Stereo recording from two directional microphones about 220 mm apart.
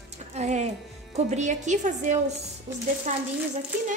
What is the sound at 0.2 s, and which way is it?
Music, 30° right (ahead or behind).